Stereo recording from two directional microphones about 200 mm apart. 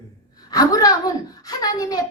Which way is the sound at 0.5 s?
20° left (ahead or behind).